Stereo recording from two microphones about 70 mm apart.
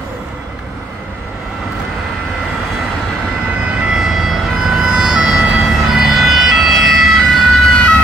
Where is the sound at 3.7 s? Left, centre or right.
Centre.